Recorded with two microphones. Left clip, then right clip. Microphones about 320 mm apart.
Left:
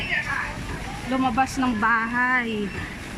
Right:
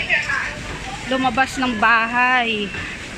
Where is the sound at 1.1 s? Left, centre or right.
Centre.